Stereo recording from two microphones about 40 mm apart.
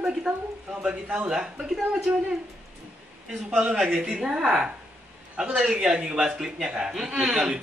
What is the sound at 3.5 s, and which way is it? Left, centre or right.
Speech, right.